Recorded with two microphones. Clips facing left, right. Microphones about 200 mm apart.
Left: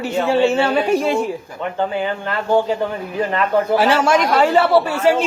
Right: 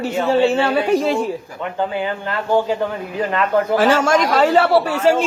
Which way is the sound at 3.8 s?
45° right (ahead or behind).